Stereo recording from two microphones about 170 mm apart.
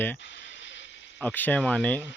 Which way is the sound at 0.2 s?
90° left.